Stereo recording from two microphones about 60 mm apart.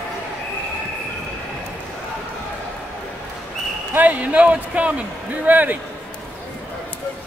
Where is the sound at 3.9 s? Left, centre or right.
Right.